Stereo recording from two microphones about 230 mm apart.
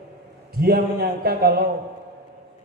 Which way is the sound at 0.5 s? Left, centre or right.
Right.